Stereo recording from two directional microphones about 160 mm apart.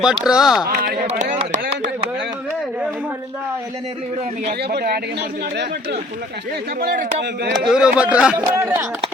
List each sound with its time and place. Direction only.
0.0 s speech: 5° right (ahead or behind)
0.7 s speech: 65° right (ahead or behind)
1.0 s chopping: 50° right (ahead or behind)
4.7 s speech: 80° right
6.7 s speech: 75° right (ahead or behind)
7.7 s speech: 5° right (ahead or behind)